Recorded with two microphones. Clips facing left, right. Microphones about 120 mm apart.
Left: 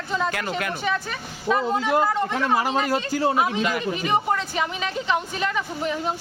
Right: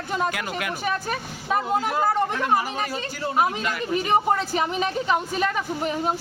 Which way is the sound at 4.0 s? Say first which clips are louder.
Right 3 dB; 35° right (ahead or behind).